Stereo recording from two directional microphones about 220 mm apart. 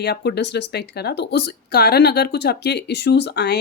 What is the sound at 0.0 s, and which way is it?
Speech, 50° left (ahead or behind).